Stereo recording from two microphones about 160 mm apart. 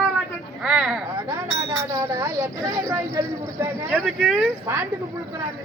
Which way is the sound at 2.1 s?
20° right (ahead or behind).